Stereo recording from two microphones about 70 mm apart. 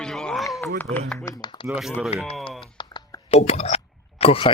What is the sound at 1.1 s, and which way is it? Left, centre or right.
Speech, left.